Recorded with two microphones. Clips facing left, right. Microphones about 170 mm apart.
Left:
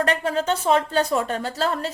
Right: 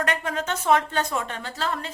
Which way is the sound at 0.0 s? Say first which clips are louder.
Left 5 dB; 30° left (ahead or behind).